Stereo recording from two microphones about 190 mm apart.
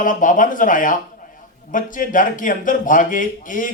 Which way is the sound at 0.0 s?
45° left (ahead or behind).